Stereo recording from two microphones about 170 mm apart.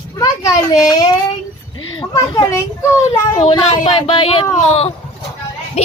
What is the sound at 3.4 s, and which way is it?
Speech, 35° left (ahead or behind).